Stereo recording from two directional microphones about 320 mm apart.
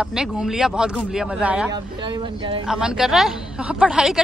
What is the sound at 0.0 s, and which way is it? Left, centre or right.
A woman's voice, centre.